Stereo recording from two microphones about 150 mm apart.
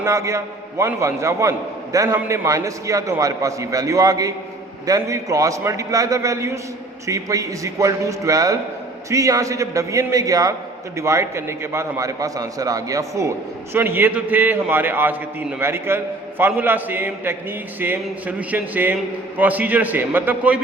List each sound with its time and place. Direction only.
0.0 s a man's voice: 20° right (ahead or behind)